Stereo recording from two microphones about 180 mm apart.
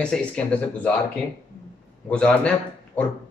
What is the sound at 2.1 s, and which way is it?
Speech, 5° left (ahead or behind).